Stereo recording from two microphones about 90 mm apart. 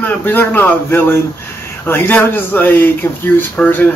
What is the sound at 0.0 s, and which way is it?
Speech, 20° left (ahead or behind).